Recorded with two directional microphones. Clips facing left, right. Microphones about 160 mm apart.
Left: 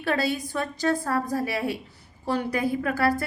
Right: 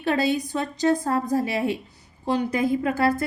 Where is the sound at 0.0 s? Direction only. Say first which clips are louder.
Right 3 dB; 20° right (ahead or behind).